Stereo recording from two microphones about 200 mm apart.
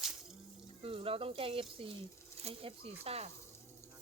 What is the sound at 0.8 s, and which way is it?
Speech, 30° right (ahead or behind).